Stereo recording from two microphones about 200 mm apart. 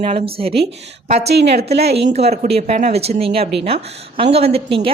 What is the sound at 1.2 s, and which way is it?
Speech, 55° right (ahead or behind).